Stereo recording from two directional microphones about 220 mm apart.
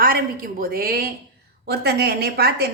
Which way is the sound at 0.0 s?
40° right (ahead or behind).